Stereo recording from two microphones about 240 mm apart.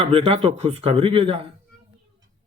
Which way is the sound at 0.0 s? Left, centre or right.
Right.